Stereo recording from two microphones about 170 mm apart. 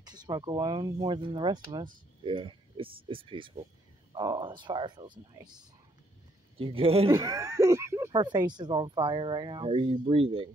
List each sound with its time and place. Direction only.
0.0 s a man's voice: 25° right (ahead or behind)
7.1 s speech: 20° right (ahead or behind)